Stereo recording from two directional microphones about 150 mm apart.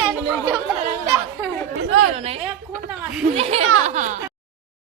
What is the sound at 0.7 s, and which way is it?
Chatter, 50° right (ahead or behind).